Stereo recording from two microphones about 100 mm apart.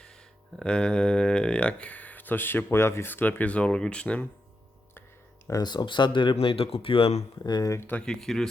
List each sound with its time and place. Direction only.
0.0 s speech: 5° left (ahead or behind)
5.5 s speech: 40° left (ahead or behind)
6.3 s speech: 70° left (ahead or behind)
7.4 s speech: 45° left (ahead or behind)
7.7 s speech: 20° left (ahead or behind); by 8.4 s 5° left (ahead or behind)